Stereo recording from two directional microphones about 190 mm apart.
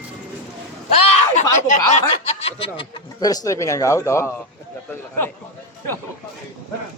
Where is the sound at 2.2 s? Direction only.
30° left (ahead or behind).